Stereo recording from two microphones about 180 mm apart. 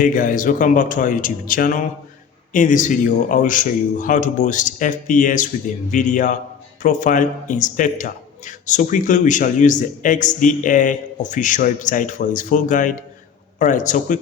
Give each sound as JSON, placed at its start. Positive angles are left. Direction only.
{"t": 0.0, "sound": "speech", "side_deg": 45}